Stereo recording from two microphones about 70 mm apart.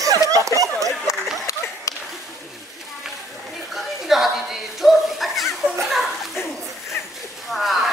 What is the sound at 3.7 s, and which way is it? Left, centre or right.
Chuckle, centre.